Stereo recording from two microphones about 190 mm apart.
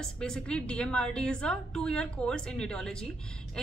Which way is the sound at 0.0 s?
5° left (ahead or behind).